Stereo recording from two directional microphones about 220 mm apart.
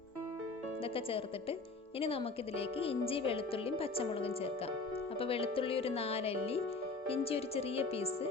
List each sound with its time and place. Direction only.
0.9 s speech: 25° left (ahead or behind)